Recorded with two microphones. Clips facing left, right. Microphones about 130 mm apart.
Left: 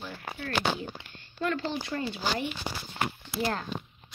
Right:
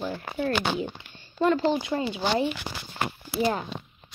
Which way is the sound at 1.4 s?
20° right (ahead or behind).